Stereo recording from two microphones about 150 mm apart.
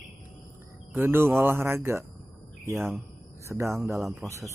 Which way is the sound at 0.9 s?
15° right (ahead or behind).